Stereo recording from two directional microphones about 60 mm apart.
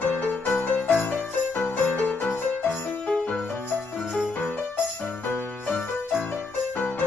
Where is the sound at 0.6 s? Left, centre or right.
Left.